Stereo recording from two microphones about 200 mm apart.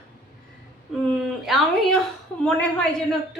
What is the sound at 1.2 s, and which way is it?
Speech, centre (ahead or behind).